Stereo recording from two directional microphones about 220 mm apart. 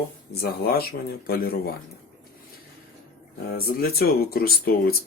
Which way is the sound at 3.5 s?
45° left (ahead or behind).